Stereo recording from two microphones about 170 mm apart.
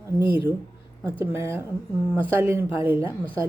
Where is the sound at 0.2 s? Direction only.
15° right (ahead or behind).